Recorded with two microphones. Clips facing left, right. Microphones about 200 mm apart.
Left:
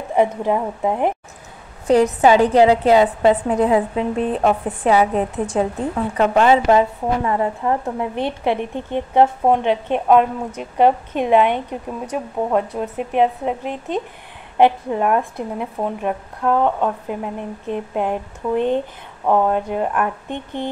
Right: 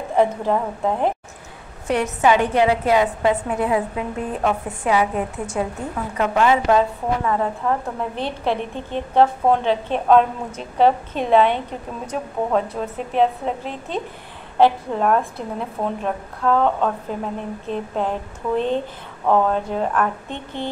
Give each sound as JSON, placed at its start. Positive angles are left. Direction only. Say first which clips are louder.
{"t": 0.1, "sound": "a woman's voice", "louder": "left 1 dB", "side_deg": 15}
{"t": 1.9, "sound": "a woman's voice", "louder": "left 5 dB", "side_deg": 35}
{"t": 6.8, "sound": "a woman's voice", "louder": "left 2 dB", "side_deg": 15}